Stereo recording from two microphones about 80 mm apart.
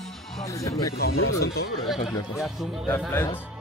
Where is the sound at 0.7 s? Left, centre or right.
Left.